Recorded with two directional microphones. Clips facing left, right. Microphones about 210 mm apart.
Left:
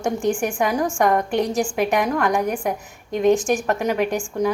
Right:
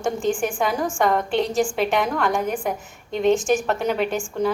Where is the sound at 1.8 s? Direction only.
5° left (ahead or behind).